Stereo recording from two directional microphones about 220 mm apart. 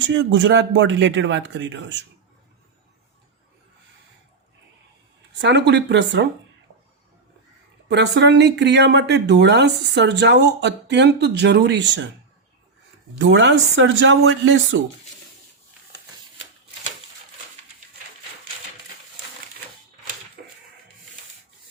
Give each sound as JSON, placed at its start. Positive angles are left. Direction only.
{"t": 0.2, "sound": "a man's voice", "side_deg": -60}
{"t": 5.3, "sound": "speech", "side_deg": -50}
{"t": 7.9, "sound": "speech", "side_deg": -50}
{"t": 13.1, "sound": "a man's voice", "side_deg": -55}